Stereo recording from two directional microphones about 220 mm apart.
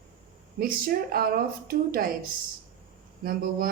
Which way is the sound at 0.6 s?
40° right (ahead or behind).